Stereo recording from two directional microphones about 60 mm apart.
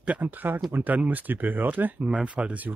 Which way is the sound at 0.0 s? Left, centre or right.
Right.